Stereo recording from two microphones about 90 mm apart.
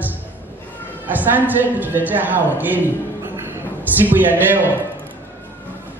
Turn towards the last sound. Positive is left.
turn(degrees=-20)  # may be behind; listen again after turning